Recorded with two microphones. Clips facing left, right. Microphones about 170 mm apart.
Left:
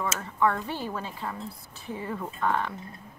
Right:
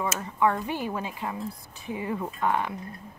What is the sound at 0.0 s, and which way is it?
Speech, 15° right (ahead or behind).